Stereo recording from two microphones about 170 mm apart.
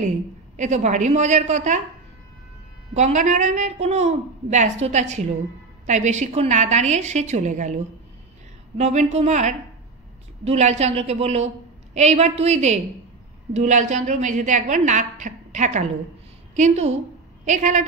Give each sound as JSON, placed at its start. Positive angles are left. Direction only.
{"t": 0.6, "sound": "a woman's voice", "side_deg": -45}
{"t": 2.9, "sound": "a woman's voice", "side_deg": -45}
{"t": 8.7, "sound": "a woman's voice", "side_deg": -40}